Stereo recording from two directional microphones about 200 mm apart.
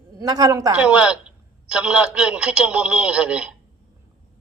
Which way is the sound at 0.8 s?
5° right (ahead or behind).